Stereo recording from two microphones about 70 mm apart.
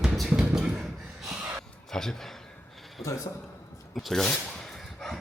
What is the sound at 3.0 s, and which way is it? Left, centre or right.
Speech, left.